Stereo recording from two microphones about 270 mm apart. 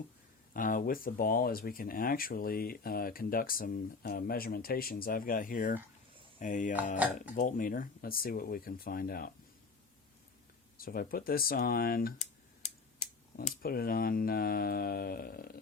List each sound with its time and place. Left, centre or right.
0.5 s speech: left
10.8 s speech: left